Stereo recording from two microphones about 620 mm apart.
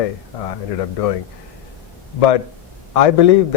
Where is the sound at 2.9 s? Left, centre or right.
Left.